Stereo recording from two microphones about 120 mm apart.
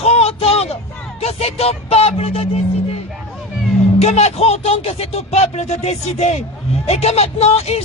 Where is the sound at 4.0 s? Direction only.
65° left (ahead or behind).